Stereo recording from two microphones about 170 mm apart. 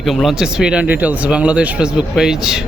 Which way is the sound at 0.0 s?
Centre (ahead or behind).